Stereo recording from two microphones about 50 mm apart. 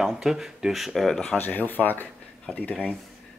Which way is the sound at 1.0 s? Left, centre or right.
Centre.